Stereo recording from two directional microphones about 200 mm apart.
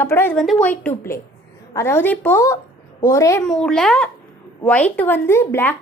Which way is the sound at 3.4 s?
5° left (ahead or behind).